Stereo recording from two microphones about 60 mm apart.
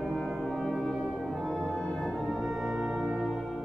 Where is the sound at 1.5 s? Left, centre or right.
Left.